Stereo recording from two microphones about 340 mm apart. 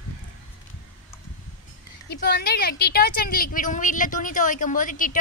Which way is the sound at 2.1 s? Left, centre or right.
Left.